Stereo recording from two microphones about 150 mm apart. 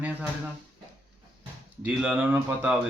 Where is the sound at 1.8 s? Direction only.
10° right (ahead or behind).